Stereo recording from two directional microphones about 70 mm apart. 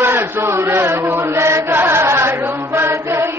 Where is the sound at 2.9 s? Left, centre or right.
Right.